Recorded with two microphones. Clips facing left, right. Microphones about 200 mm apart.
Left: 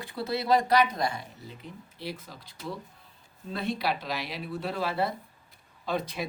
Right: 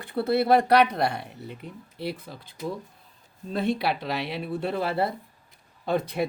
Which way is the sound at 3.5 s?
55° right (ahead or behind).